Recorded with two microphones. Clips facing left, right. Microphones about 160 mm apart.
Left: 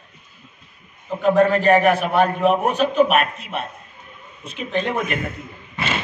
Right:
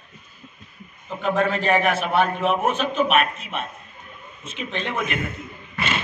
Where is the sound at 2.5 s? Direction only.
35° left (ahead or behind).